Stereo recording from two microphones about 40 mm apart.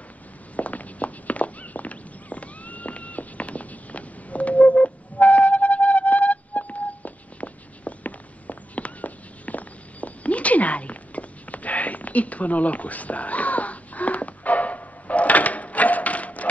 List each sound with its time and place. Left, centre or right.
0.6 s walk: left